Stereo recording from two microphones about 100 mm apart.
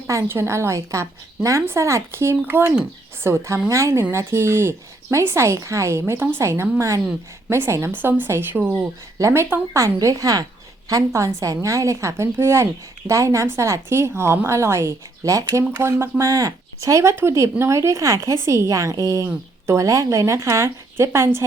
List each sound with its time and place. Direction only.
0.1 s a woman's voice: 30° right (ahead or behind)